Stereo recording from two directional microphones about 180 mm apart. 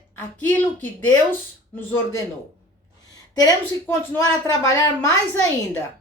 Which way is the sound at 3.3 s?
20° left (ahead or behind).